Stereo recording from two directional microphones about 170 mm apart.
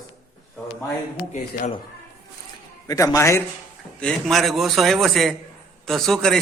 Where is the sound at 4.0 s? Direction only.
5° left (ahead or behind).